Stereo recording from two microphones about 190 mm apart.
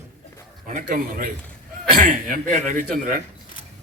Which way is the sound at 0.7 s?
45° right (ahead or behind).